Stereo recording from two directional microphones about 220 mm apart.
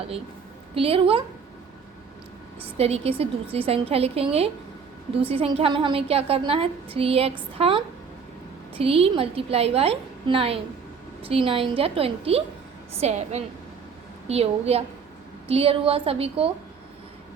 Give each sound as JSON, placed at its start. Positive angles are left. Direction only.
{"t": 0.7, "sound": "a woman's voice", "side_deg": -25}
{"t": 2.6, "sound": "a woman's voice", "side_deg": -25}
{"t": 8.8, "sound": "a woman's voice", "side_deg": -25}